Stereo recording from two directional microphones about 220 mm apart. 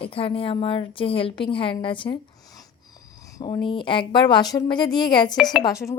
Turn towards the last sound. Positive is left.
turn(degrees=15)  # may be behind; listen again after turning